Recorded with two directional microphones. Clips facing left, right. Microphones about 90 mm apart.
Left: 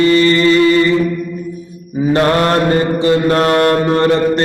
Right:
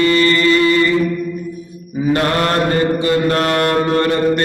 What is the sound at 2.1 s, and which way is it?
Mantra, 30° left (ahead or behind).